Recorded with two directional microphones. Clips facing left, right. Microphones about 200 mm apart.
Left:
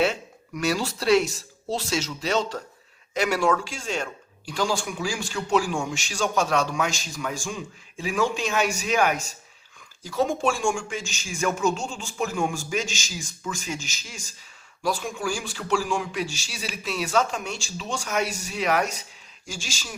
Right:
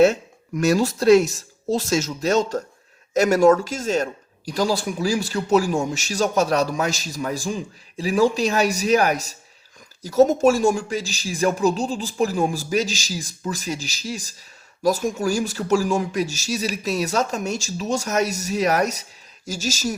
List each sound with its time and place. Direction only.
0.0 s speech: 45° right (ahead or behind)